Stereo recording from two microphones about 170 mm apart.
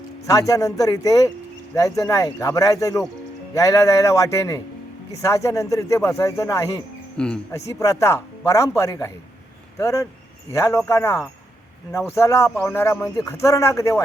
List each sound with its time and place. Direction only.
0.3 s speech: 20° left (ahead or behind)
7.2 s speech: 5° left (ahead or behind)
7.7 s speech: 20° left (ahead or behind)